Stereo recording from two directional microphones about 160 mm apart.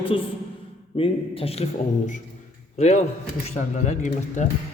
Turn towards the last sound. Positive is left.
turn(degrees=50)  # may be behind; listen again after turning